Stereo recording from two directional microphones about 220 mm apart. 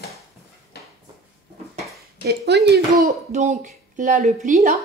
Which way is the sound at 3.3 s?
35° right (ahead or behind).